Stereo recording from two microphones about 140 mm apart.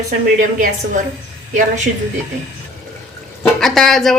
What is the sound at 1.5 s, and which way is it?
Speech, 60° right (ahead or behind).